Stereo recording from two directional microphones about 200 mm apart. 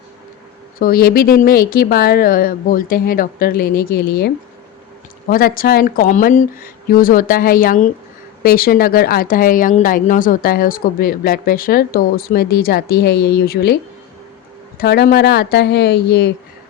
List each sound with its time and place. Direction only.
0.8 s speech: 45° left (ahead or behind)
5.3 s speech: 45° left (ahead or behind)
14.8 s speech: 50° left (ahead or behind)